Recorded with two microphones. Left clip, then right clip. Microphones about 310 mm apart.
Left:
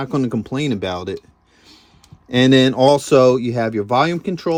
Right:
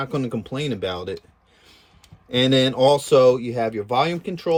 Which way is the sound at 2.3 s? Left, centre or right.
Left.